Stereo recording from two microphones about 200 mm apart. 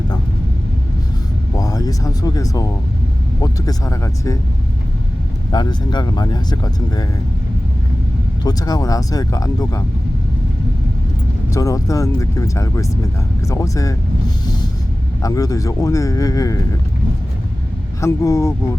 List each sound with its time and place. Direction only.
1.5 s a man's voice: 20° left (ahead or behind)
5.5 s speech: 20° left (ahead or behind)
8.4 s a man's voice: 20° left (ahead or behind)
11.5 s a man's voice: 15° left (ahead or behind)
15.2 s a man's voice: 15° left (ahead or behind)
18.0 s a man's voice: 15° left (ahead or behind)